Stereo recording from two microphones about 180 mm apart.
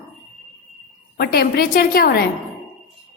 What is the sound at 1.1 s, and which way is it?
A woman's voice, 55° left (ahead or behind).